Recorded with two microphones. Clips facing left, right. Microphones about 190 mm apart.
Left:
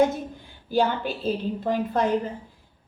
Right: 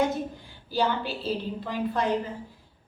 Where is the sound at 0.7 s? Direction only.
50° left (ahead or behind).